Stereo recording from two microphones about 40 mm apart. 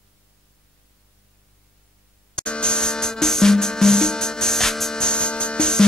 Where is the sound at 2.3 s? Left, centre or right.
Left.